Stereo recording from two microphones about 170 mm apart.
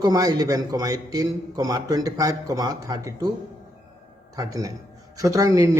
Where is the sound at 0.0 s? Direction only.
25° right (ahead or behind).